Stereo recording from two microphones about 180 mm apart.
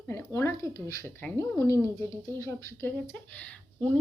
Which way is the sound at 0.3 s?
15° left (ahead or behind).